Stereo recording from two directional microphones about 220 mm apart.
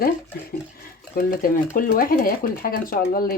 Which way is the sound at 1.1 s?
40° left (ahead or behind).